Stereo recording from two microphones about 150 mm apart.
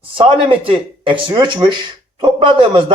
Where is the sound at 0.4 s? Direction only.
35° right (ahead or behind).